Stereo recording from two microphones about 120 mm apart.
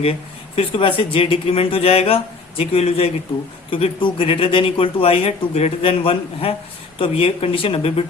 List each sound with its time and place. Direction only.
0.0 s speech: 55° left (ahead or behind)